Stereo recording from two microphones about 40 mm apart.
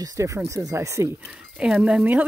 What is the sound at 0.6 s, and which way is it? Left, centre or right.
Speech, right.